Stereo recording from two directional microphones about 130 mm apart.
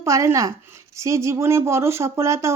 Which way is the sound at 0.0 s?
25° right (ahead or behind).